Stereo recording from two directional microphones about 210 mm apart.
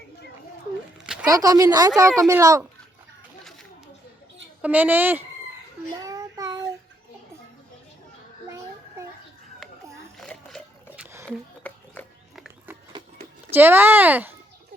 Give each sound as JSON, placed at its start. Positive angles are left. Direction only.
{"t": 1.3, "sound": "speech", "side_deg": -15}
{"t": 4.6, "sound": "speech", "side_deg": -10}
{"t": 6.0, "sound": "child singing", "side_deg": -15}
{"t": 8.4, "sound": "child singing", "side_deg": -15}
{"t": 10.2, "sound": "a sound", "side_deg": 5}
{"t": 11.3, "sound": "a sound", "side_deg": 5}
{"t": 13.5, "sound": "speech", "side_deg": -10}